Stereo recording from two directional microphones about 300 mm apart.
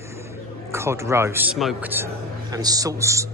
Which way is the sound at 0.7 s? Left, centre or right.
Centre.